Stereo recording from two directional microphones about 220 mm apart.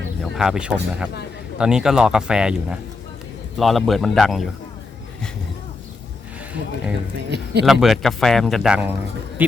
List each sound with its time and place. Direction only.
0.2 s speech: centre (ahead or behind)
7.3 s a sound: 50° right (ahead or behind)
7.6 s speech: centre (ahead or behind)